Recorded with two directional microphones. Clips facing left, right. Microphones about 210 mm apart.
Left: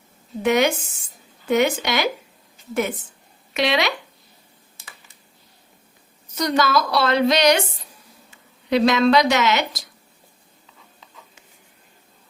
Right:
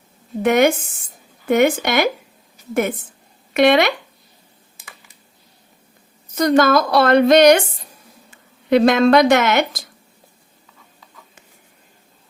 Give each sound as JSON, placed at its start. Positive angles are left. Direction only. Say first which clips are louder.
{"t": 0.4, "sound": "a woman's voice", "louder": "right 4 dB", "side_deg": -50}
{"t": 3.5, "sound": "a woman's voice", "louder": "right 7 dB", "side_deg": -55}
{"t": 6.3, "sound": "a woman's voice", "louder": "right 6 dB", "side_deg": -50}
{"t": 8.7, "sound": "a woman's voice", "louder": "right 4 dB", "side_deg": -50}